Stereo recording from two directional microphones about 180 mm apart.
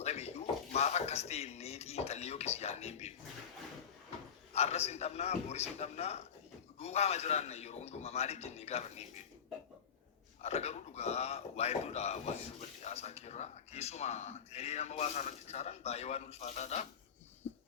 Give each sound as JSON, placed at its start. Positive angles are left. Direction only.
{"t": 0.0, "sound": "speech", "side_deg": 35}
{"t": 4.5, "sound": "speech", "side_deg": 35}
{"t": 10.4, "sound": "speech", "side_deg": 35}